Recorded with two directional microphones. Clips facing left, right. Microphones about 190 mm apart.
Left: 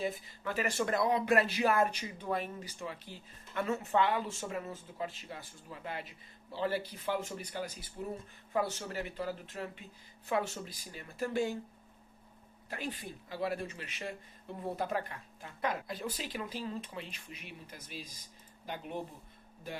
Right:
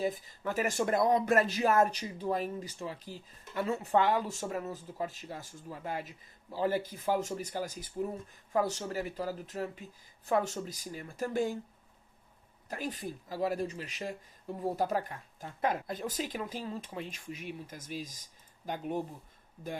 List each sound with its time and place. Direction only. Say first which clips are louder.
0.0 s speech: right 3 dB; 45° right (ahead or behind)
12.6 s speech: right 3 dB; 45° right (ahead or behind)